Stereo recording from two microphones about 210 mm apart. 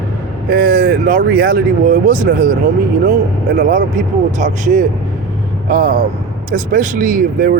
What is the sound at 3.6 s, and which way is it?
Speech, 40° right (ahead or behind).